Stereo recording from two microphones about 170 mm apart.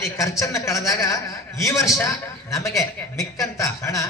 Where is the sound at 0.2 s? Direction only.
20° left (ahead or behind).